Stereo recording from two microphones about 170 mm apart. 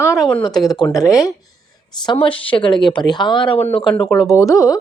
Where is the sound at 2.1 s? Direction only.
30° left (ahead or behind).